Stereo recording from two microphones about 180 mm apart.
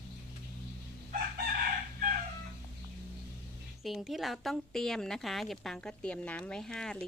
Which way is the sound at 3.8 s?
Centre (ahead or behind).